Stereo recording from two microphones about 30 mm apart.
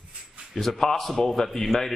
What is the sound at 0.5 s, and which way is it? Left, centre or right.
A man's voice, centre.